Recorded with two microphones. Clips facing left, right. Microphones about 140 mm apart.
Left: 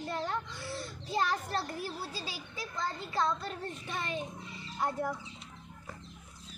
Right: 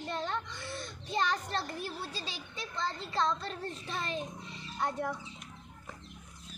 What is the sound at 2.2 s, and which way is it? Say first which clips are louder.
Speech: left 1 dB; 25° right (ahead or behind).